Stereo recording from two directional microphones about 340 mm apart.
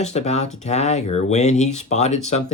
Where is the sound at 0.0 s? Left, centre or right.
Centre.